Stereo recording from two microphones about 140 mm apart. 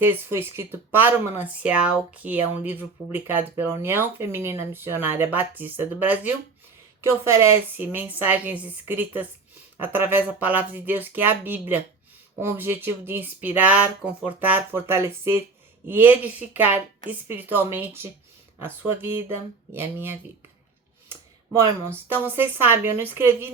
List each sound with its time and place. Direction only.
0.0 s speech: 15° right (ahead or behind)
21.1 s a sound: 20° right (ahead or behind)
22.1 s speech: 15° right (ahead or behind)